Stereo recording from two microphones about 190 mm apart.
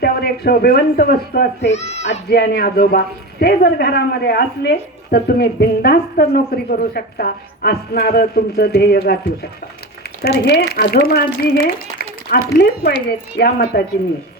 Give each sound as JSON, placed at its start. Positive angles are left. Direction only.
{"t": 0.0, "sound": "speech", "side_deg": 55}
{"t": 1.6, "sound": "a child's voice", "side_deg": 35}
{"t": 2.3, "sound": "a woman's voice", "side_deg": 60}
{"t": 11.6, "sound": "a sound", "side_deg": 55}
{"t": 13.1, "sound": "a woman's voice", "side_deg": 55}